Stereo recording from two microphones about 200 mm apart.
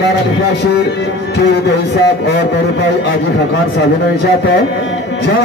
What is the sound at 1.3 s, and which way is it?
Music, 55° left (ahead or behind).